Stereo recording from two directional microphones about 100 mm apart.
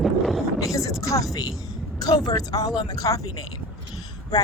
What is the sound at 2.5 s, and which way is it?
Speech, 40° left (ahead or behind).